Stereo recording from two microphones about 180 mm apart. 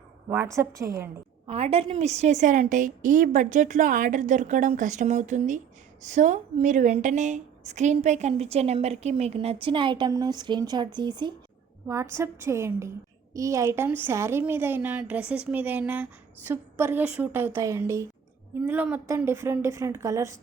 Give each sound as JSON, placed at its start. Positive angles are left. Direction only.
{"t": 0.3, "sound": "a woman's voice", "side_deg": -15}
{"t": 1.5, "sound": "a woman's voice", "side_deg": -35}